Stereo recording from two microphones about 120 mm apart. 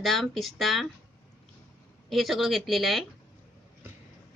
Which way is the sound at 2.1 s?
Centre (ahead or behind).